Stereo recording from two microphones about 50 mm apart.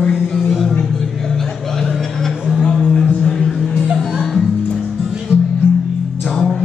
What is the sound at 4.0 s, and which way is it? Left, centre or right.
Music, centre.